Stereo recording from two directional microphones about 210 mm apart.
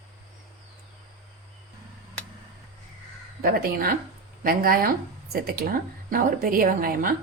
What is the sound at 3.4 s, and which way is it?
Speech, 45° right (ahead or behind).